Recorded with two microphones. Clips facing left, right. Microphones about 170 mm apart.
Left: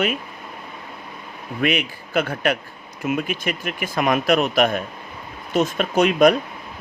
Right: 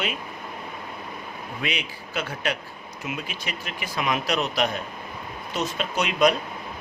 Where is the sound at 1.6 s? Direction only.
55° left (ahead or behind).